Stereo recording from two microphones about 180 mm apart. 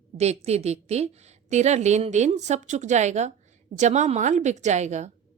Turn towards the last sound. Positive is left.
turn(degrees=-40)  # may be behind; listen again after turning